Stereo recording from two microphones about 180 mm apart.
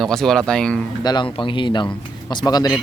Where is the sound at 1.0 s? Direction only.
25° left (ahead or behind).